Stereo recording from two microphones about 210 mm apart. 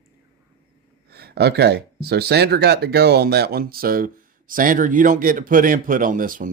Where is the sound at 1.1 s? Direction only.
50° right (ahead or behind).